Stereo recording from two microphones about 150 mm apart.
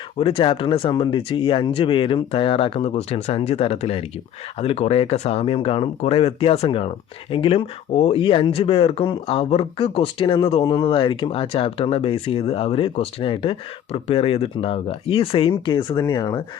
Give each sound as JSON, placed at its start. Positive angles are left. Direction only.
{"t": 0.2, "sound": "speech", "side_deg": 35}
{"t": 10.6, "sound": "speech", "side_deg": 25}
{"t": 10.8, "sound": "speech", "side_deg": 35}